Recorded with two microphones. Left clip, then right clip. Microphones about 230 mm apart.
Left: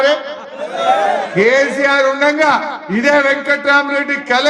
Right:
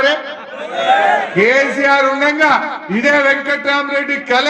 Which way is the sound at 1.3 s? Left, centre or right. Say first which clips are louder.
Even; left.